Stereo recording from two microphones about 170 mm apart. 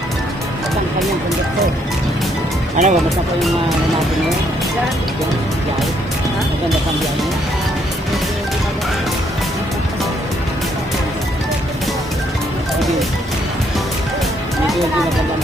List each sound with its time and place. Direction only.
2.8 s speech: 50° right (ahead or behind)